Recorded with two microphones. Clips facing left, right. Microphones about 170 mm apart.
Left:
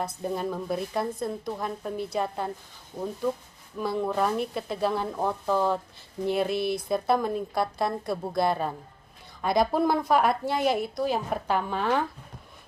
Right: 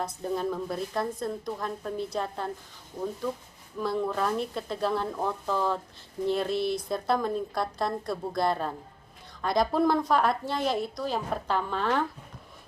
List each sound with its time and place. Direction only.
0.0 s a woman's voice: 5° left (ahead or behind)
3.8 s a woman's voice: 5° left (ahead or behind)